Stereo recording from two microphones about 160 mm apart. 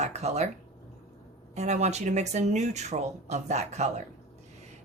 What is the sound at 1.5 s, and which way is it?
Speech, 45° right (ahead or behind).